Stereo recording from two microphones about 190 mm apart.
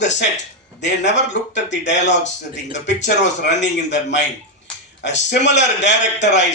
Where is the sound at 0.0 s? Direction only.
65° left (ahead or behind).